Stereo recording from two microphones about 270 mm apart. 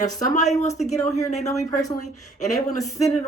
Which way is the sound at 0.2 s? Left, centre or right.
Left.